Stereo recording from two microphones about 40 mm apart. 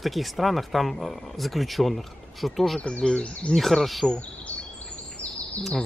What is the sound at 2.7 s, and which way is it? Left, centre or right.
Speech, left.